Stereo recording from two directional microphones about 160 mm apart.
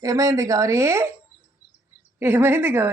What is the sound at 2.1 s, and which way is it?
Speech, 15° right (ahead or behind).